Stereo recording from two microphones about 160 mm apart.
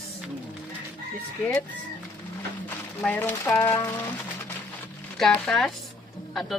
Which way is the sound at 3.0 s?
10° left (ahead or behind).